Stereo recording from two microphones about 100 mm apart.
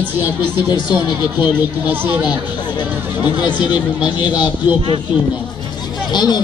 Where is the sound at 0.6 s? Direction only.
50° left (ahead or behind).